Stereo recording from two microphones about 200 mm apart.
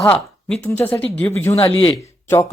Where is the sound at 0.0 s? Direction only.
5° left (ahead or behind).